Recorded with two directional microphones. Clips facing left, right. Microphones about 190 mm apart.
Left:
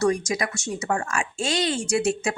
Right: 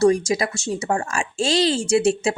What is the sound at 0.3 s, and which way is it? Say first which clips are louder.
Speech: right 4 dB; 30° right (ahead or behind).